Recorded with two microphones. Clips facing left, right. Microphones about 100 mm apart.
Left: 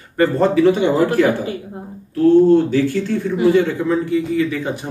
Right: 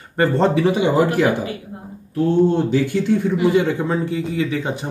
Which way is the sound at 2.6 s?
15° right (ahead or behind).